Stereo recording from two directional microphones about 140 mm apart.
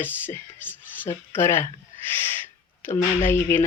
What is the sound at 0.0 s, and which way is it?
Speech, 15° left (ahead or behind).